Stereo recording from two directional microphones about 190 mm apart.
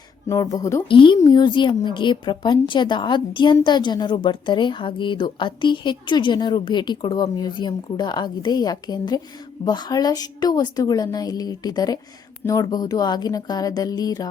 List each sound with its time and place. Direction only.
0.3 s speech: 20° left (ahead or behind)
0.9 s a woman's voice: 25° left (ahead or behind)